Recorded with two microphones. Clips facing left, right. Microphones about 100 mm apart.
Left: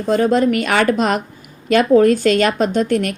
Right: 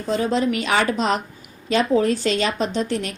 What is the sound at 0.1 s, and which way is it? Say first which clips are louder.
A woman's voice: left 6 dB; 50° left (ahead or behind).